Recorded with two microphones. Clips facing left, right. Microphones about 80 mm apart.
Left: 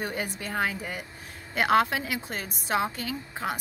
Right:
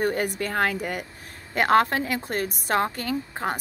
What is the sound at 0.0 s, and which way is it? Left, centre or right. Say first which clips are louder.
A woman's voice: right 7 dB; right.